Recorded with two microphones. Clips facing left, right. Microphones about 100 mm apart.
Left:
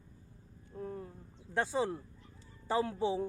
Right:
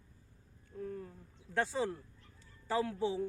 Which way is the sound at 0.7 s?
30° left (ahead or behind).